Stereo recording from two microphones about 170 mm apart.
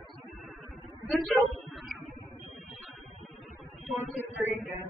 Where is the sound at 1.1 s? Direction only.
Centre (ahead or behind).